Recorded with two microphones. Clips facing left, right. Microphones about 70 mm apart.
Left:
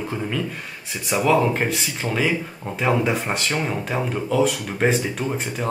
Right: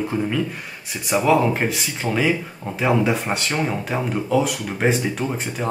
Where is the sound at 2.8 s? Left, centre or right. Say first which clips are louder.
Right 2 dB; centre.